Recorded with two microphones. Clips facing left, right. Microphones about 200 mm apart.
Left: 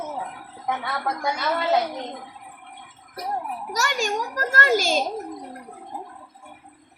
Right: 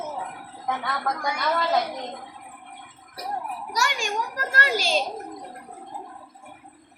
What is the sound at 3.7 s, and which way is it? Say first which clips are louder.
A child's voice: left 3 dB; 45° left (ahead or behind).